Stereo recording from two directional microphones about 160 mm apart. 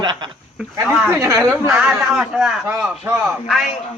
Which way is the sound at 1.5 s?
Centre (ahead or behind).